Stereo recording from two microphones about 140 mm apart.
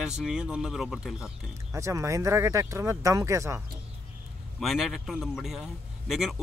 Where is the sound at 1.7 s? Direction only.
20° right (ahead or behind).